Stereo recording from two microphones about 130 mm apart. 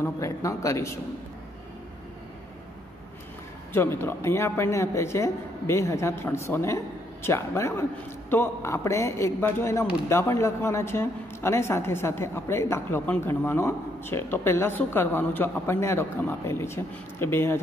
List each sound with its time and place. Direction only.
0.0 s speech: 25° left (ahead or behind)
3.7 s speech: 20° left (ahead or behind)